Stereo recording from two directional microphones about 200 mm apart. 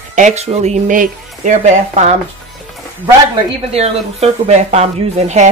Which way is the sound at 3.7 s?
30° right (ahead or behind).